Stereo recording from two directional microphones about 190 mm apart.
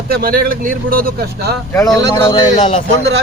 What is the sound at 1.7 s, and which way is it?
Speech, 15° left (ahead or behind).